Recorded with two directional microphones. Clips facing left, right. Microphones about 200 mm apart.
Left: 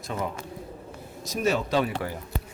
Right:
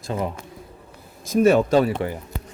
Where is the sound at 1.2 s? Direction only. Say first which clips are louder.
Right 10 dB; 55° right (ahead or behind).